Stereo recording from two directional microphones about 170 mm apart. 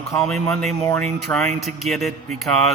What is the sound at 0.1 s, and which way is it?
A man's voice, centre (ahead or behind).